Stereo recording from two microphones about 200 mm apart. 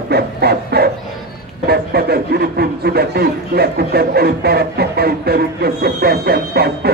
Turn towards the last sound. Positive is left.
turn(degrees=-50)  # may be behind; listen again after turning